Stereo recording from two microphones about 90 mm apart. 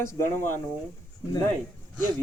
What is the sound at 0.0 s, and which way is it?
Speech, 30° left (ahead or behind).